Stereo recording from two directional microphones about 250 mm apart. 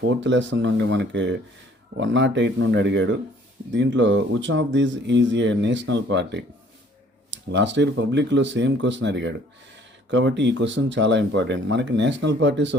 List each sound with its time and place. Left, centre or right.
0.2 s speech: right